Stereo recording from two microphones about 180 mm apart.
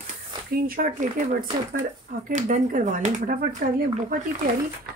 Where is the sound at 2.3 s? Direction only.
40° right (ahead or behind).